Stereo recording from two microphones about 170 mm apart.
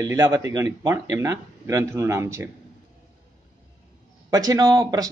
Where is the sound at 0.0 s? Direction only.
20° right (ahead or behind).